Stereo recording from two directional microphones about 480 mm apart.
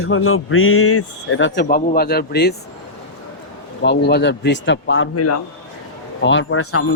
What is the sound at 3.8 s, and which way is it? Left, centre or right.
Speech, left.